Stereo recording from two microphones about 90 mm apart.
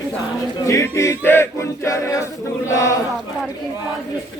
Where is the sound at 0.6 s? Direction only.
35° left (ahead or behind).